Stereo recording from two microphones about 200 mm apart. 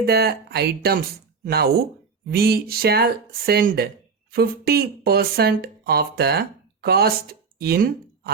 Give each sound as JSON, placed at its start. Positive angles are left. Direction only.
{"t": 0.0, "sound": "speech", "side_deg": -50}